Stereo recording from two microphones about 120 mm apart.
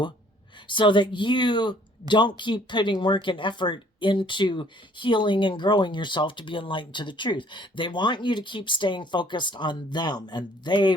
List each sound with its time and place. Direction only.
0.7 s speech: 40° left (ahead or behind)